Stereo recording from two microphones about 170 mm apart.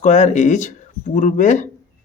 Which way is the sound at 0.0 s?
45° left (ahead or behind).